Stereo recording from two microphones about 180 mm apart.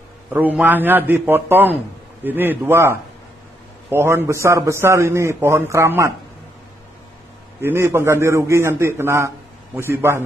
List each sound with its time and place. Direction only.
0.3 s a man's voice: 10° right (ahead or behind)
7.6 s a man's voice: 15° right (ahead or behind)